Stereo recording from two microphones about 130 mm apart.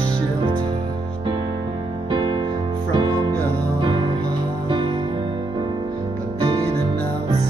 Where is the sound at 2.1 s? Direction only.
35° right (ahead or behind).